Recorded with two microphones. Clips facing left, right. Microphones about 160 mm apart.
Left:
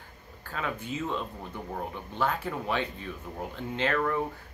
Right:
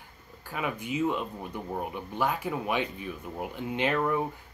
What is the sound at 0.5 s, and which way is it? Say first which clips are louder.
Speech: right 2 dB; 15° right (ahead or behind).